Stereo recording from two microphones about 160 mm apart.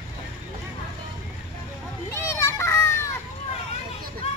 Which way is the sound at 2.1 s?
15° left (ahead or behind).